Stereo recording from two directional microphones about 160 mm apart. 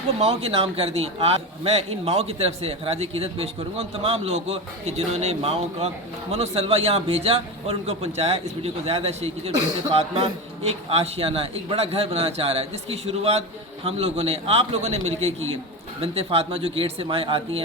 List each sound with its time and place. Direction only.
0.2 s a man's voice: 40° right (ahead or behind)